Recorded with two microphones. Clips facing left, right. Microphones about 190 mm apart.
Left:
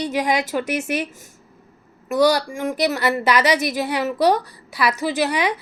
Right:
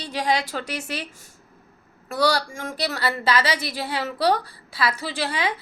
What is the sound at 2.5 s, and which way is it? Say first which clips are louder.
A woman's voice: left 7 dB; 15° left (ahead or behind).